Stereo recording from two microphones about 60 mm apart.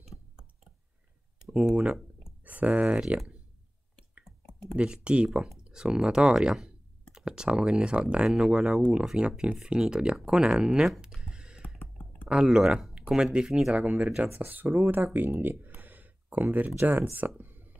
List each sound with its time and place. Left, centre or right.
1.4 s speech: centre
2.4 s speech: right
4.2 s clicking: centre
4.7 s speech: centre
11.1 s a sound: centre
12.3 s speech: centre
14.0 s speech: centre
14.4 s speech: right
15.1 s a sound: right
17.0 s speech: right
17.4 s whispering: right